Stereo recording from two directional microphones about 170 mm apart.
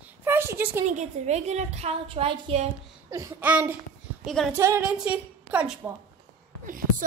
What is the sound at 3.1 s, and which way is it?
Speech, 15° right (ahead or behind).